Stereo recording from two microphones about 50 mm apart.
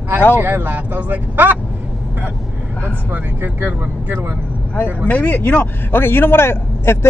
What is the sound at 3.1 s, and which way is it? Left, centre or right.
Speech, right.